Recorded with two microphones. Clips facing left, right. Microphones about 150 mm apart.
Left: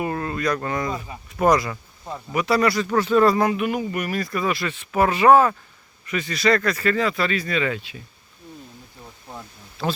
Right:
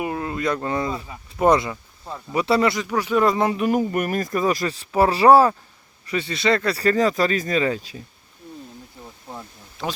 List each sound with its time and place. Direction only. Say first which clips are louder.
0.0 s speech: even; 15° right (ahead or behind)
2.8 s speech: left 2 dB; 10° right (ahead or behind); by 8.0 s 35° right (ahead or behind)